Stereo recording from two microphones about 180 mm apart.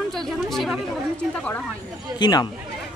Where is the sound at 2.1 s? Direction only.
25° left (ahead or behind).